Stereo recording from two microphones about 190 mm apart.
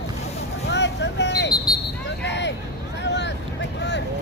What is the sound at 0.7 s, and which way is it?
Vehicle, 65° left (ahead or behind).